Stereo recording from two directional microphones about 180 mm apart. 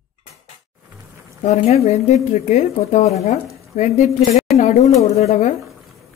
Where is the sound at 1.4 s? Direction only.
35° left (ahead or behind).